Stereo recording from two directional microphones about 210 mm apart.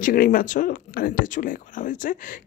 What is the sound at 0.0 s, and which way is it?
Speech, 40° left (ahead or behind).